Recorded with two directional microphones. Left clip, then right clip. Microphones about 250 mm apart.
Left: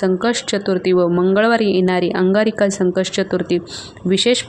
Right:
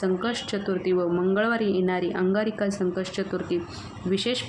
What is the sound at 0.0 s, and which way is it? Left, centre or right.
Speech, left.